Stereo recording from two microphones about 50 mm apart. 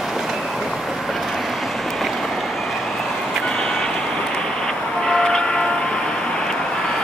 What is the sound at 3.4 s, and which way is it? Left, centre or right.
Vehicle, centre.